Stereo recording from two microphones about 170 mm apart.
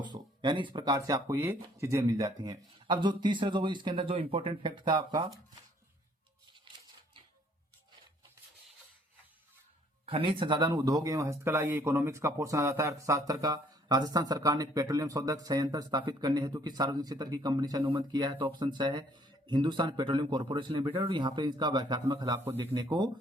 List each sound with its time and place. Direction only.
0.0 s speech: 25° right (ahead or behind)
10.1 s speech: 30° right (ahead or behind)